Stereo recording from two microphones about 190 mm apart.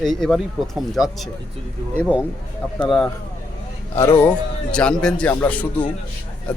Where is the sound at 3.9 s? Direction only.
15° left (ahead or behind).